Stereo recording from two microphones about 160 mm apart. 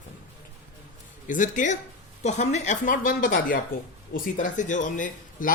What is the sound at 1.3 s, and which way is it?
Speech, 55° left (ahead or behind).